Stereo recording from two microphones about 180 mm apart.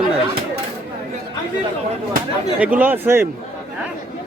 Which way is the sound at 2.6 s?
5° right (ahead or behind).